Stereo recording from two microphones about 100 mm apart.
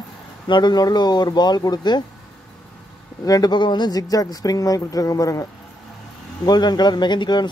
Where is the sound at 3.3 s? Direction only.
40° left (ahead or behind).